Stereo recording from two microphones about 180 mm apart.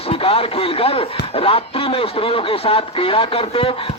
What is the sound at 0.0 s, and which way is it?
Speech, 30° left (ahead or behind).